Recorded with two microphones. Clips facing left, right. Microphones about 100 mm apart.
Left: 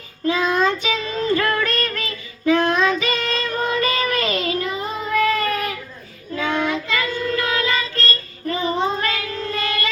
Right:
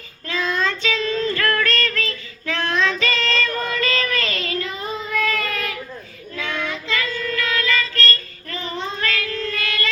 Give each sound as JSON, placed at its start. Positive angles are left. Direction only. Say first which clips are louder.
{"t": 0.3, "sound": "child singing", "louder": "left 5 dB", "side_deg": 15}
{"t": 6.3, "sound": "child singing", "louder": "left 6 dB", "side_deg": 45}
{"t": 7.0, "sound": "child singing", "louder": "left 3 dB", "side_deg": 20}